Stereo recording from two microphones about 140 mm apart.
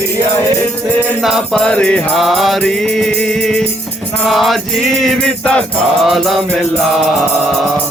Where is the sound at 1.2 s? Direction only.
Centre (ahead or behind).